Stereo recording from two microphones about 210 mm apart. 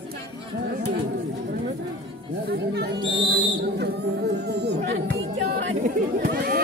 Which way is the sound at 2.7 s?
50° right (ahead or behind).